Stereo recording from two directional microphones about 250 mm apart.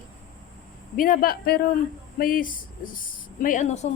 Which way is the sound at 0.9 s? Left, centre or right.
Left.